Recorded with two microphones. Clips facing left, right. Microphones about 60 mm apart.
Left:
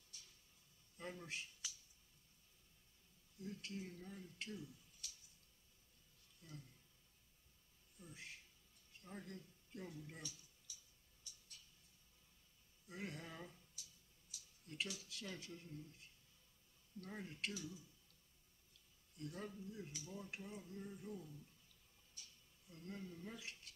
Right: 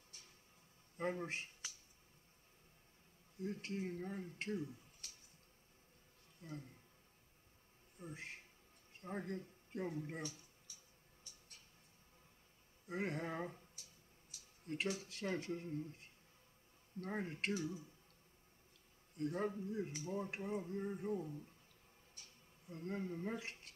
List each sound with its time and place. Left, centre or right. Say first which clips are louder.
0.1 s a sound: right 1 dB; right
0.9 s speech: right 9 dB; right
3.3 s speech: right 7 dB; right
6.4 s speech: right 8 dB; right
8.0 s speech: right 7 dB; right
11.2 s a sound: even; right
12.8 s speech: right 9 dB; right
19.1 s speech: right 10 dB; right
22.1 s a sound: even; right